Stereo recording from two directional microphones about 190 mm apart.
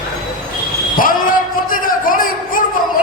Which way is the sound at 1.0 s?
45° left (ahead or behind).